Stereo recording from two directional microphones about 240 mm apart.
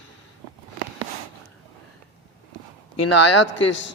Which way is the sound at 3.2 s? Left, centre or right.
Left.